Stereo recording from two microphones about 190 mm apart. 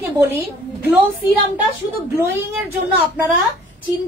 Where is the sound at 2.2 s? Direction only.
10° right (ahead or behind).